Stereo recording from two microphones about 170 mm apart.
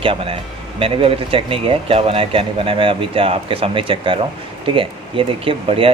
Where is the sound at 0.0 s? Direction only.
35° right (ahead or behind).